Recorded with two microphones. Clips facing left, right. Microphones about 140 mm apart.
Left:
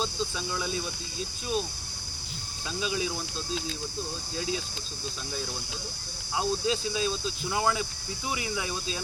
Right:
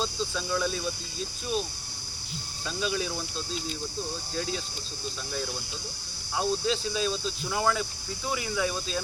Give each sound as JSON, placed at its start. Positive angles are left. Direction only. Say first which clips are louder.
{"t": 0.0, "sound": "speech", "louder": "even", "side_deg": 10}
{"t": 2.6, "sound": "speech", "louder": "right 1 dB", "side_deg": 10}
{"t": 6.3, "sound": "speech", "louder": "right 1 dB", "side_deg": 15}